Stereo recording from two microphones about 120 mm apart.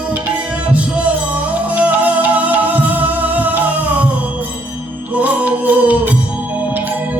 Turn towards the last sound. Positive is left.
turn(degrees=-15)  # may be behind; listen again after turning